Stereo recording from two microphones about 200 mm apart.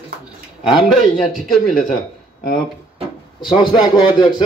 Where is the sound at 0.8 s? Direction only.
Centre (ahead or behind).